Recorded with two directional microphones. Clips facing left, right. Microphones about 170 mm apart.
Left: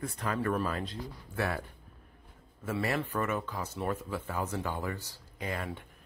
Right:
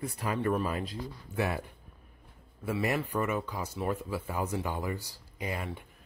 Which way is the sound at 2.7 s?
10° right (ahead or behind).